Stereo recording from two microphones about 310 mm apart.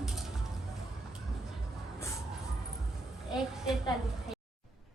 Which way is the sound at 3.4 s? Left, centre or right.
Centre.